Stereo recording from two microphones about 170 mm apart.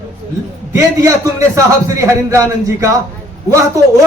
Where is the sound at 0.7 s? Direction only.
20° right (ahead or behind).